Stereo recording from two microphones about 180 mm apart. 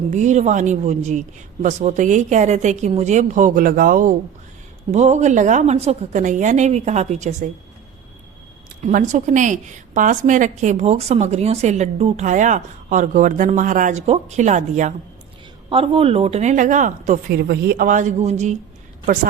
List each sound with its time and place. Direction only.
0.1 s a woman's voice: 40° right (ahead or behind)
8.8 s a woman's voice: 45° right (ahead or behind)
17.3 s a woman's voice: 60° right (ahead or behind)